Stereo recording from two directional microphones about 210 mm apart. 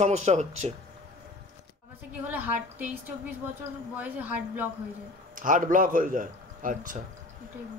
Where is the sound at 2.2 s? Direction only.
10° right (ahead or behind).